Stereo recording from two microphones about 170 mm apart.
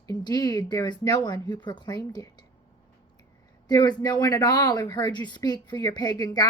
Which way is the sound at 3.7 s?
25° left (ahead or behind).